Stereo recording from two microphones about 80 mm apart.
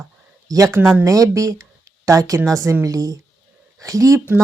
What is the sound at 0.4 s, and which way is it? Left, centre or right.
A woman's voice, right.